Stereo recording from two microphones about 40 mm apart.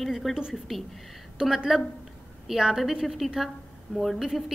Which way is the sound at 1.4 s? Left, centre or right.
Centre.